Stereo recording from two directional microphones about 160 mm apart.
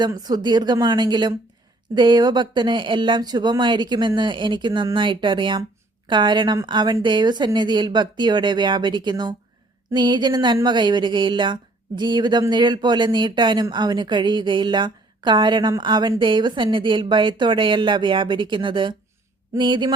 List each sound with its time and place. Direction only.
0.0 s speech: 25° right (ahead or behind)